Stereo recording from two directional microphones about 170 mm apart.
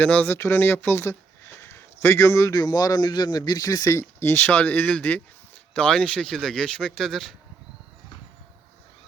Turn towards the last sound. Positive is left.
turn(degrees=0)  # may be behind; listen again after turning